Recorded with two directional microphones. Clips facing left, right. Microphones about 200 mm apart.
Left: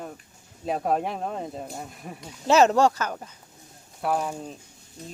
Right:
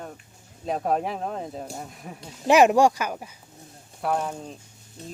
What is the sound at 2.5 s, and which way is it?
Speech, 15° right (ahead or behind).